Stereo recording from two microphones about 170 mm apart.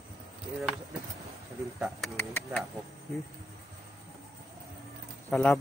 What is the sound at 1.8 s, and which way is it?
Bird, centre (ahead or behind).